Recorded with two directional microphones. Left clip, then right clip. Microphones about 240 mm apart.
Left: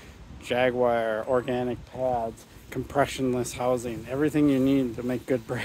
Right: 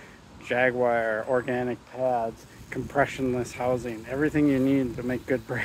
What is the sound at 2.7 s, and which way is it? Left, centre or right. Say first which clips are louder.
Speech: even; centre.